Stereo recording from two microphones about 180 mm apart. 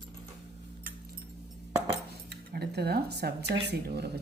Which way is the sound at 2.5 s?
60° right (ahead or behind).